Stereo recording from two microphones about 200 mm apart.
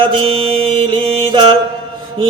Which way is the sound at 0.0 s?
25° right (ahead or behind).